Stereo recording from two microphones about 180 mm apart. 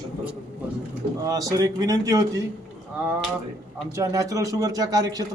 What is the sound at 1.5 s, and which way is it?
Speech, 20° right (ahead or behind).